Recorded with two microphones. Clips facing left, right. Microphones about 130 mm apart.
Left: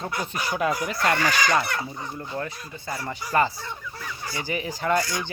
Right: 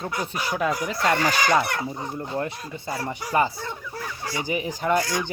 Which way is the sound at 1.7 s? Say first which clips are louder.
Right 2 dB; 25° right (ahead or behind).